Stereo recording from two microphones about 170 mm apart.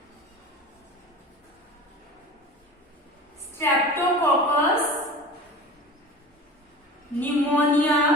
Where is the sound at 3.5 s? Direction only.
15° left (ahead or behind).